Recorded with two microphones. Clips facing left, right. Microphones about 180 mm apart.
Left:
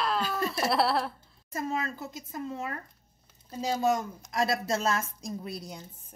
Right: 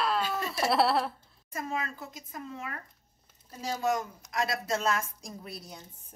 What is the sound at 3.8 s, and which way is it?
A woman's voice, 30° left (ahead or behind).